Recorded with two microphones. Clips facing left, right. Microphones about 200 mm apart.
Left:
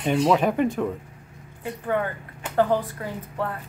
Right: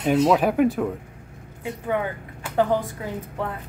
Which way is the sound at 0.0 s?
Centre (ahead or behind).